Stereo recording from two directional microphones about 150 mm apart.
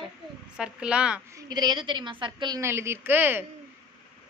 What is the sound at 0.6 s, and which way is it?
Speech, 5° right (ahead or behind).